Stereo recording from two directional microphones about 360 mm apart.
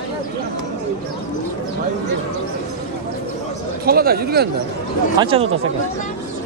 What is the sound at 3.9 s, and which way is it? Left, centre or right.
Speech, right.